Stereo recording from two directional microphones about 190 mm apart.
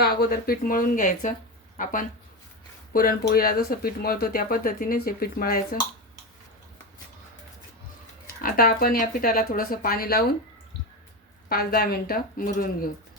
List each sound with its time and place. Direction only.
0.0 s speech: 55° left (ahead or behind)
8.4 s speech: 50° left (ahead or behind)
11.4 s speech: 50° left (ahead or behind)